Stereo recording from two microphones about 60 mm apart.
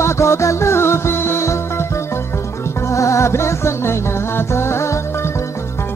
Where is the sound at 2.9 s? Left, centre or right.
Left.